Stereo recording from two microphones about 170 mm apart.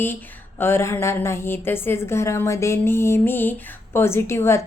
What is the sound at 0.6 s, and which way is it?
A woman's voice, 15° left (ahead or behind).